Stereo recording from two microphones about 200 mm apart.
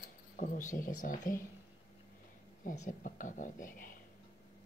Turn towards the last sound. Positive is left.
turn(degrees=45)  # may be behind; listen again after turning